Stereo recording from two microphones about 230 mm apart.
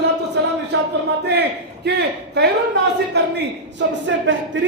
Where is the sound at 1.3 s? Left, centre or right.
Right.